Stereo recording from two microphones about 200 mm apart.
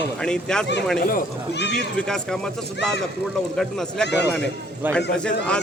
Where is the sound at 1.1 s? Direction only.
55° left (ahead or behind).